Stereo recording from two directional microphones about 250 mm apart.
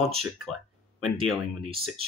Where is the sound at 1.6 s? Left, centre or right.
Right.